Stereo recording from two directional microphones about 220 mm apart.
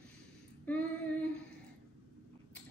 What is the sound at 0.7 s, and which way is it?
Female singing, 5° left (ahead or behind).